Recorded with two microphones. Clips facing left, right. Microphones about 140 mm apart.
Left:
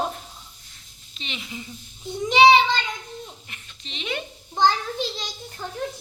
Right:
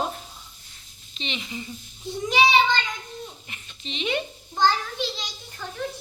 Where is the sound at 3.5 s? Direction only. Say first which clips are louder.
Right 5 dB; centre (ahead or behind).